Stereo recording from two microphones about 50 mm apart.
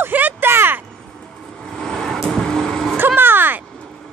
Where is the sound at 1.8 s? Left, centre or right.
Centre.